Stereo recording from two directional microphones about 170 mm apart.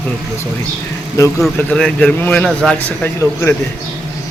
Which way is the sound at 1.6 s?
5° left (ahead or behind).